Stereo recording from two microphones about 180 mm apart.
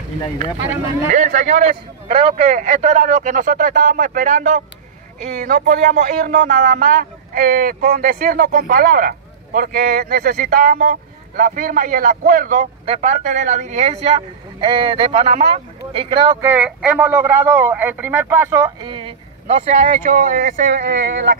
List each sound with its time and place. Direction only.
1.1 s speech: 45° right (ahead or behind)
12.8 s speech: 35° right (ahead or behind)
16.3 s speech: 5° right (ahead or behind)
18.9 s speech: 30° right (ahead or behind); by 20.8 s 45° right (ahead or behind)
20.8 s speech: 65° right (ahead or behind)